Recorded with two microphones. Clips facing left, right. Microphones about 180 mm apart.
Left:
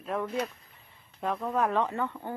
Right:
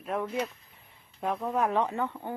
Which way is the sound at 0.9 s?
15° right (ahead or behind).